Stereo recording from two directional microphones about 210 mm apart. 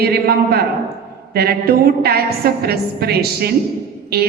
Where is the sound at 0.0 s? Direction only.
45° right (ahead or behind).